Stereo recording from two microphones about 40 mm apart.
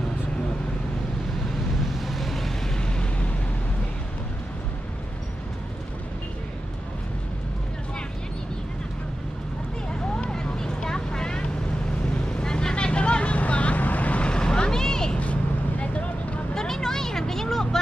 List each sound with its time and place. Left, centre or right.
2.0 s vehicle: centre
2.7 s a sound: left
9.9 s vehicle: centre
15.8 s vehicle: left
16.6 s vehicle: centre